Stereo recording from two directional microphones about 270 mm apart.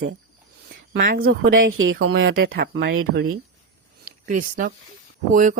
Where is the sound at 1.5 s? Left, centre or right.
Right.